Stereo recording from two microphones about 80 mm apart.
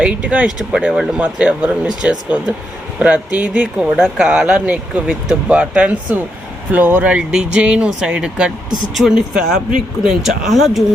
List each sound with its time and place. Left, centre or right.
0.0 s speech: centre
3.9 s speech: centre